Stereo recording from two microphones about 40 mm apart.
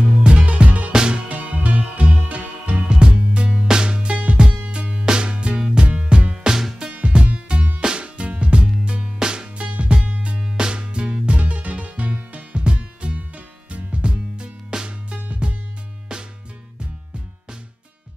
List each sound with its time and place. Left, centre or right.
0.2 s music: right
0.9 s music: right
1.3 s music: right
2.9 s music: right
6.9 s music: right
9.6 s music: right
10.4 s music: right
11.3 s music: right